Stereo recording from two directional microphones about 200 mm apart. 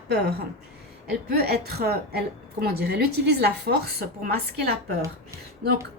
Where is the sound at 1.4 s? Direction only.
50° right (ahead or behind).